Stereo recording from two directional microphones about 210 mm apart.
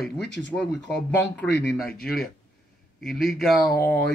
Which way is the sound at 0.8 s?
5° left (ahead or behind).